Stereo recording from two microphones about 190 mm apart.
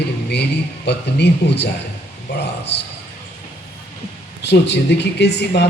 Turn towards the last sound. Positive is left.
turn(degrees=60)  # may be behind; listen again after turning